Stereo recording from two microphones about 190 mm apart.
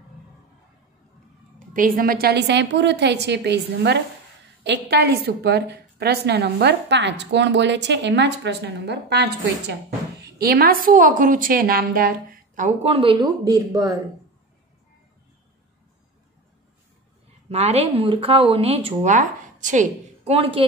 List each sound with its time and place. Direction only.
1.7 s a woman's voice: 50° right (ahead or behind); by 13.9 s 20° right (ahead or behind)
17.5 s speech: 30° right (ahead or behind)